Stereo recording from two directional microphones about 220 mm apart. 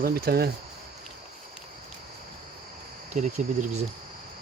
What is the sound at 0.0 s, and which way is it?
Speech, 45° right (ahead or behind).